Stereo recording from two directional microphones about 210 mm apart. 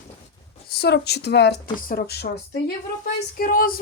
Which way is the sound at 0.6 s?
50° left (ahead or behind).